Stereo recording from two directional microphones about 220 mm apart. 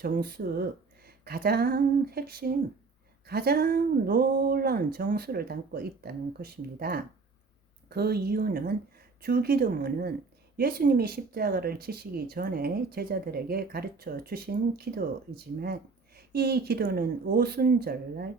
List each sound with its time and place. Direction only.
0.0 s speech: 45° right (ahead or behind)